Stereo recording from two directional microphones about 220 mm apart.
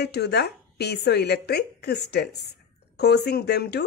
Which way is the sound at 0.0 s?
50° left (ahead or behind).